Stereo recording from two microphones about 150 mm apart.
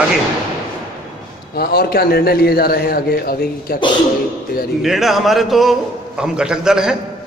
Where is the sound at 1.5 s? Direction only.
90° left.